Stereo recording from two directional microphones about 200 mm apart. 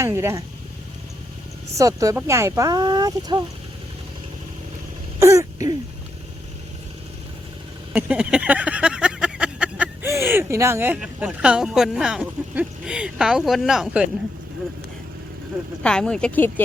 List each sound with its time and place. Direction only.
0.0 s speech: 15° right (ahead or behind)
1.8 s speech: 15° right (ahead or behind)
5.2 s throat clearing: 15° right (ahead or behind)
7.9 s a sound: 5° right (ahead or behind)
15.8 s speech: 5° left (ahead or behind)